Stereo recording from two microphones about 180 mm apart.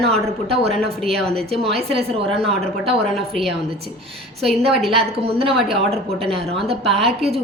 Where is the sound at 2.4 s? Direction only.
30° right (ahead or behind).